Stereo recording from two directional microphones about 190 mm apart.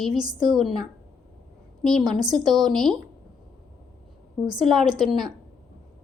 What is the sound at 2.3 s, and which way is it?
Speech, centre (ahead or behind).